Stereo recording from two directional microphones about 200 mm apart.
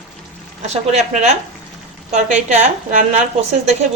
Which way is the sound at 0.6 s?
35° right (ahead or behind).